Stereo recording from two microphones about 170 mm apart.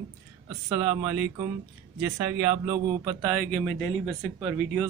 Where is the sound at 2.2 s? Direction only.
20° right (ahead or behind).